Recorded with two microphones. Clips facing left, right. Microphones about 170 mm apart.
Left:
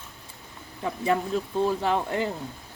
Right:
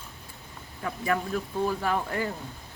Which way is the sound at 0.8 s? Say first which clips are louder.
Left 3 dB; 20° left (ahead or behind).